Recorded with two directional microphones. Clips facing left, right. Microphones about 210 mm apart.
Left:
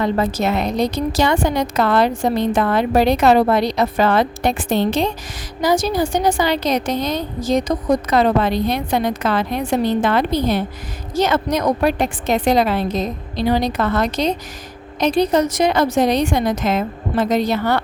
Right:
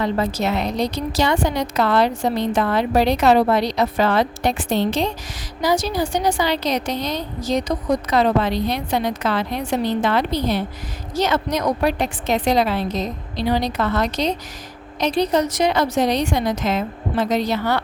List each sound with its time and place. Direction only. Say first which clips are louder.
0.0 s a woman's voice: left 2 dB; 50° left (ahead or behind)